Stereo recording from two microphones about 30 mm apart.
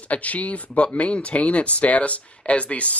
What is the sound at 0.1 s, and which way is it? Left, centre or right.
Speech, left.